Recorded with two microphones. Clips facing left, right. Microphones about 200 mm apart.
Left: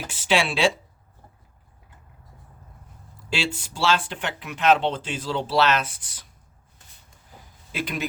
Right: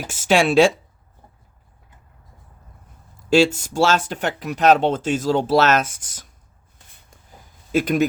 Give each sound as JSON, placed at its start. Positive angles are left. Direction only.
{"t": 0.1, "sound": "speech", "side_deg": -45}
{"t": 3.2, "sound": "speech", "side_deg": -45}
{"t": 7.7, "sound": "speech", "side_deg": -45}